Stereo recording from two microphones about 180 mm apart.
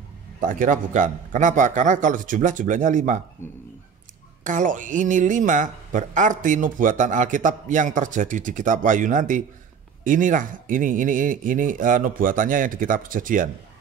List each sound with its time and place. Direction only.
0.4 s speech: 45° right (ahead or behind)
4.5 s speech: 45° right (ahead or behind)